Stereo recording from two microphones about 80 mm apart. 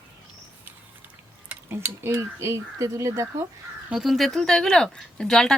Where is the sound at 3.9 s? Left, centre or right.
Centre.